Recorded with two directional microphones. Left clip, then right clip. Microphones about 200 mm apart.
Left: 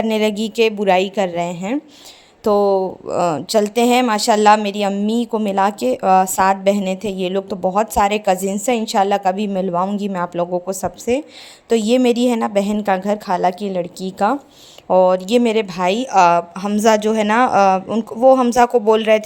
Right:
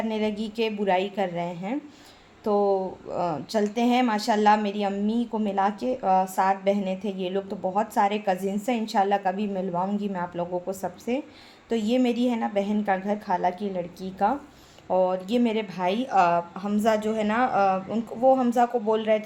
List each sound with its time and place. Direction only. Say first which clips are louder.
0.0 s speech: left 10 dB; 55° left (ahead or behind)